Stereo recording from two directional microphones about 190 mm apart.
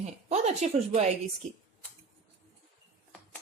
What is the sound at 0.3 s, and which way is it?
Speech, 35° right (ahead or behind).